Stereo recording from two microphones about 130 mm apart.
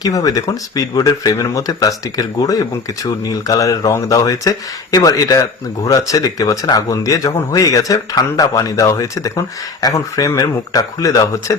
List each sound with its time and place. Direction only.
0.0 s speech: 25° left (ahead or behind)